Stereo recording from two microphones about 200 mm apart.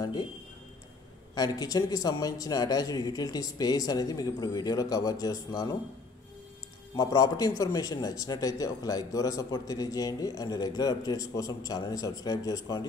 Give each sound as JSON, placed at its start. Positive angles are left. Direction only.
{"t": 0.0, "sound": "speech", "side_deg": 20}
{"t": 1.3, "sound": "speech", "side_deg": 20}
{"t": 7.0, "sound": "a man's voice", "side_deg": 20}